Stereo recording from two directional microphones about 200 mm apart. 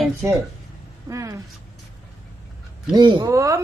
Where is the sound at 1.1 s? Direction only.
15° right (ahead or behind).